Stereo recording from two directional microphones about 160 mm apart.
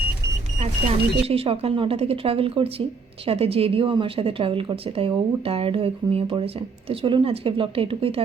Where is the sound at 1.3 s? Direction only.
40° right (ahead or behind).